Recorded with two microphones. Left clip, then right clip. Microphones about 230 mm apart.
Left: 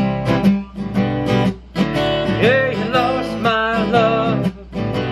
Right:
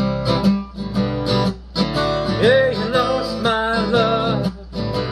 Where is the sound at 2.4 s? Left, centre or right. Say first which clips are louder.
Right 2 dB; centre.